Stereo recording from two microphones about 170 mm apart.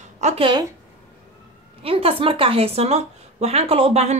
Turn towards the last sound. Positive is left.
turn(degrees=-40)  # may be behind; listen again after turning